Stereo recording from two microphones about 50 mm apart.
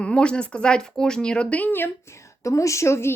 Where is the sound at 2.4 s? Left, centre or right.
Left.